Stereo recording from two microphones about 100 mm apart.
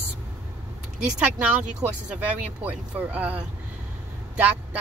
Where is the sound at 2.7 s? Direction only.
15° right (ahead or behind).